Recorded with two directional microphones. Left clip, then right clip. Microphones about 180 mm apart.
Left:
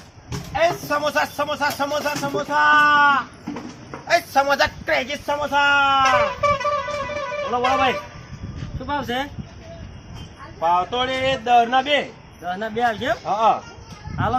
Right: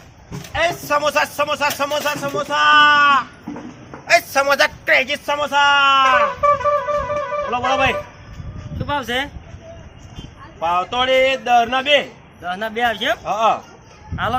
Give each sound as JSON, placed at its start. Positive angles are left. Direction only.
{"t": 0.5, "sound": "speech", "side_deg": -5}
{"t": 6.4, "sound": "music", "side_deg": -35}
{"t": 8.9, "sound": "a man's voice", "side_deg": 0}
{"t": 10.6, "sound": "a man's voice", "side_deg": -10}